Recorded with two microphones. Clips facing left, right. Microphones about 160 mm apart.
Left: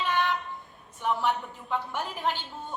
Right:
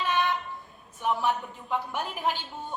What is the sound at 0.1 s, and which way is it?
Train, 20° right (ahead or behind).